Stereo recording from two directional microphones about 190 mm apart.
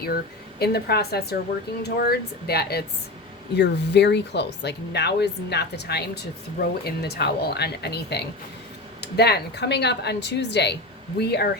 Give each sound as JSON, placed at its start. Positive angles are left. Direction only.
{"t": 0.6, "sound": "speech", "side_deg": 55}